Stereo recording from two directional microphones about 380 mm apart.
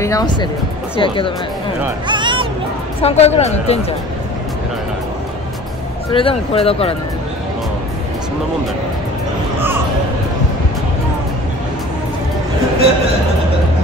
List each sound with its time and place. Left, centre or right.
0.0 s speech: centre
1.8 s speech: centre
3.0 s speech: centre
6.1 s speech: centre